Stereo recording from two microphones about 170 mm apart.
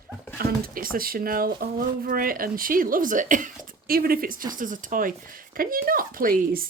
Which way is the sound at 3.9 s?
60° right (ahead or behind).